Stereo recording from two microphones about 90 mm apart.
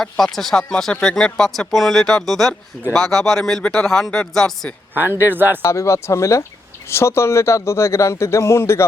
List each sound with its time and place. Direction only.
0.0 s speech: 5° left (ahead or behind)
5.2 s speech: 25° right (ahead or behind)
5.6 s a man's voice: 35° left (ahead or behind)